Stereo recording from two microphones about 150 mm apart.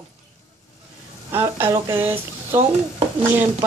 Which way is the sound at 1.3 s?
15° right (ahead or behind).